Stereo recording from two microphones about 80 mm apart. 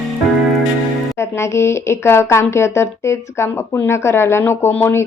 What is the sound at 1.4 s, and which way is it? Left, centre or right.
Speech, left.